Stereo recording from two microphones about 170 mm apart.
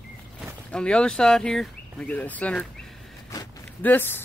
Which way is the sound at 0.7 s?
5° left (ahead or behind).